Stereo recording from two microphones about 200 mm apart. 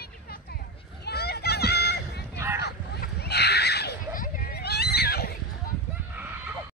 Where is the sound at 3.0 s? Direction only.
55° left (ahead or behind).